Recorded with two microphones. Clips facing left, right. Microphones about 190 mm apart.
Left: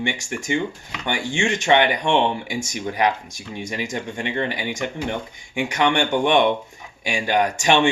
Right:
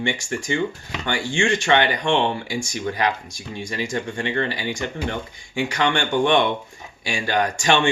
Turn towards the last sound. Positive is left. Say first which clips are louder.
# left 2 dB
turn(degrees=20)  # may be behind; listen again after turning